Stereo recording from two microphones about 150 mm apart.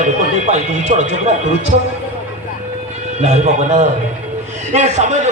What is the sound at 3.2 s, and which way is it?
A man's voice, 50° right (ahead or behind).